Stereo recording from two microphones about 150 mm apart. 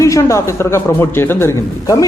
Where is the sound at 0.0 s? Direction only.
20° left (ahead or behind).